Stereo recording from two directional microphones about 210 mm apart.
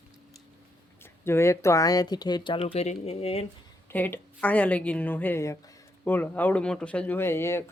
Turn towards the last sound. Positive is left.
turn(degrees=10)  # may be behind; listen again after turning